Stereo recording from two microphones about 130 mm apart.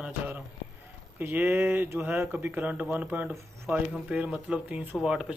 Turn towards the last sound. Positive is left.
turn(degrees=-5)  # may be behind; listen again after turning